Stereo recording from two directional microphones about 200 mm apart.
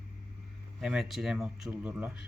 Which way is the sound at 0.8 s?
Centre (ahead or behind).